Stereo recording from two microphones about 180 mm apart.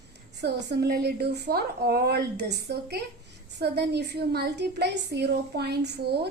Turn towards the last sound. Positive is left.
turn(degrees=-65)  # may be behind; listen again after turning